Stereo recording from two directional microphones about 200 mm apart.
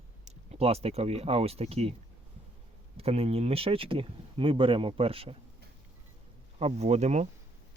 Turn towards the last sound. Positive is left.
turn(degrees=-35)  # may be behind; listen again after turning